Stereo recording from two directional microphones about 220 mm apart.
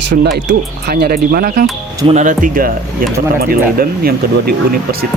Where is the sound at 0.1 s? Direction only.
50° right (ahead or behind).